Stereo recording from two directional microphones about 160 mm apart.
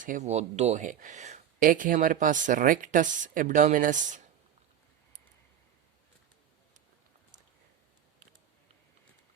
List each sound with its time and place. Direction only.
0.0 s speech: 50° right (ahead or behind)
1.6 s speech: 55° right (ahead or behind)